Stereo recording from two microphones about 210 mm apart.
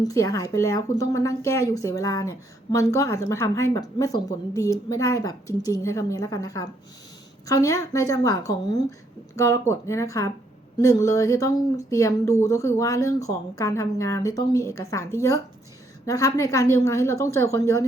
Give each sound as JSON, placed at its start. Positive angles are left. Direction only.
{"t": 0.0, "sound": "speech", "side_deg": 15}